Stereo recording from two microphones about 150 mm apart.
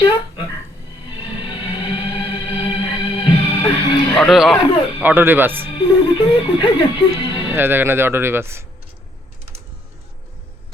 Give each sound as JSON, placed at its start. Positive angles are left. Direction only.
{"t": 0.0, "sound": "dog", "side_deg": 30}
{"t": 1.0, "sound": "music", "side_deg": 35}
{"t": 4.1, "sound": "speech", "side_deg": 0}
{"t": 4.5, "sound": "a sound", "side_deg": 35}
{"t": 4.9, "sound": "speech", "side_deg": -10}
{"t": 5.7, "sound": "speech", "side_deg": 35}
{"t": 7.5, "sound": "speech", "side_deg": -15}